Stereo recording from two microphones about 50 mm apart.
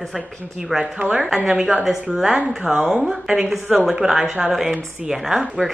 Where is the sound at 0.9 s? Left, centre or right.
Right.